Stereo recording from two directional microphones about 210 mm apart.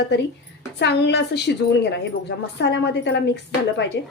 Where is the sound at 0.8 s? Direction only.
55° left (ahead or behind).